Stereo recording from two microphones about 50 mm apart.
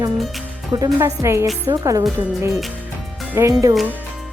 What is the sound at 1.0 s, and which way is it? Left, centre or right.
Speech, right.